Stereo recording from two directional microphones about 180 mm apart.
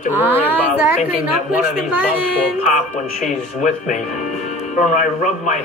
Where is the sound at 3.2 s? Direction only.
45° left (ahead or behind).